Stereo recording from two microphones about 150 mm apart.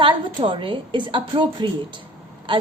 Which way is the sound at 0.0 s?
35° right (ahead or behind).